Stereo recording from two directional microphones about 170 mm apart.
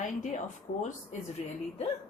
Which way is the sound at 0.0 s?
45° left (ahead or behind).